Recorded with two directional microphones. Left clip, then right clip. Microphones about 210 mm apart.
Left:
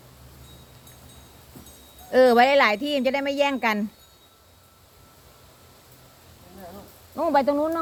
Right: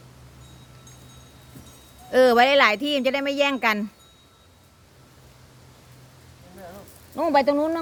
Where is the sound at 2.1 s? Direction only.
10° right (ahead or behind).